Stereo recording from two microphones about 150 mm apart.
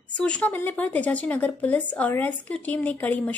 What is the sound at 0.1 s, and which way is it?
Speech, 5° left (ahead or behind).